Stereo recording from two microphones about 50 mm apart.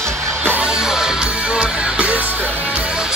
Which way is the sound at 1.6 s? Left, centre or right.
Right.